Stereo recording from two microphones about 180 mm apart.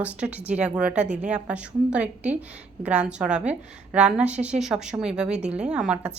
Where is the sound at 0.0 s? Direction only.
5° right (ahead or behind).